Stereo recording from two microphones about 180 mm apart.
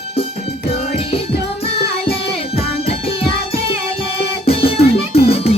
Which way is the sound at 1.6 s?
30° left (ahead or behind).